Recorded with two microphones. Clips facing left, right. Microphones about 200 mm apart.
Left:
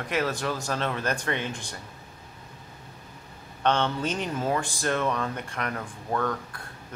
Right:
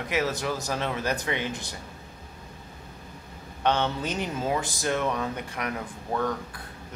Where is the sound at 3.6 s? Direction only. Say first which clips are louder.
Left 1 dB; 10° right (ahead or behind).